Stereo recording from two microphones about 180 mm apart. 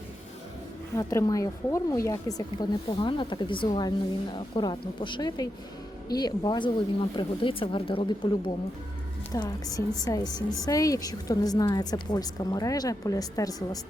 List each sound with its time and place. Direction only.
0.9 s speech: 20° left (ahead or behind)
3.0 s a woman's voice: 25° left (ahead or behind)
9.3 s a woman's voice: 20° left (ahead or behind)